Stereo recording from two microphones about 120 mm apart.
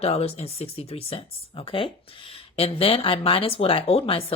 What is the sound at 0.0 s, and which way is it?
Speech, 55° left (ahead or behind).